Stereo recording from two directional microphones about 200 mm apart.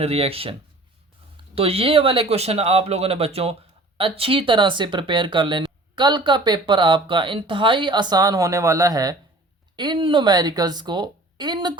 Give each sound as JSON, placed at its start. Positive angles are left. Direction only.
{"t": 0.0, "sound": "speech", "side_deg": -30}
{"t": 1.5, "sound": "speech", "side_deg": -30}